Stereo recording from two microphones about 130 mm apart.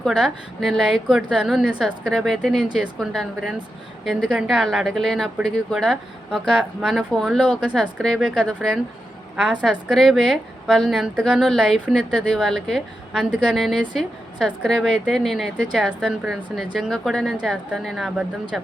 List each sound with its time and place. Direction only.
0.0 s speech: 5° right (ahead or behind)